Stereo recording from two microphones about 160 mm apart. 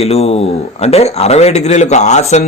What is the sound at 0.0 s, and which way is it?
Speech, 40° left (ahead or behind).